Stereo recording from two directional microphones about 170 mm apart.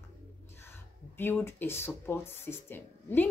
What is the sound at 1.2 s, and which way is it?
Speech, 15° left (ahead or behind).